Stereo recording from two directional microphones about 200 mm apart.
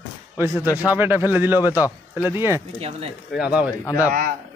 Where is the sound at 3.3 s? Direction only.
5° right (ahead or behind).